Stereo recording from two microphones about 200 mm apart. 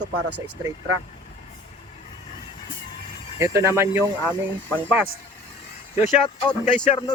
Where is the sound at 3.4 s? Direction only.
15° right (ahead or behind).